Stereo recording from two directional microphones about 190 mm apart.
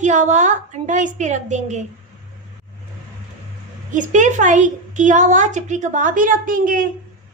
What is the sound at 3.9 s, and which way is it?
A woman's voice, 40° right (ahead or behind).